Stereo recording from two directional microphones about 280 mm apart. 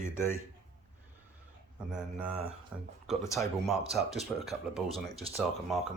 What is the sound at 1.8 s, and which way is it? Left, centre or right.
Speech, centre.